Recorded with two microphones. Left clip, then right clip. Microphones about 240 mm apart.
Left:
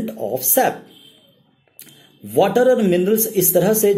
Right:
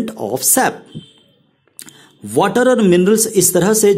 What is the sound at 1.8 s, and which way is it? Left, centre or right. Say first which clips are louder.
Speech: right 6 dB; right.